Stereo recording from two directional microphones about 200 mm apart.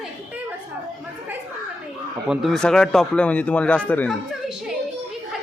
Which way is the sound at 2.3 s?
Centre (ahead or behind).